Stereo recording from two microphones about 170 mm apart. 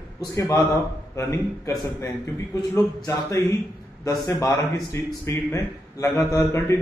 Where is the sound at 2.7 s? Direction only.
15° left (ahead or behind).